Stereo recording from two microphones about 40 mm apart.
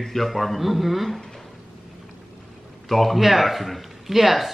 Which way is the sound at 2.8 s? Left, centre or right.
Centre.